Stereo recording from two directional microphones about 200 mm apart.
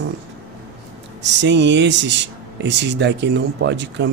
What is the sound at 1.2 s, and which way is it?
Speech, 60° right (ahead or behind).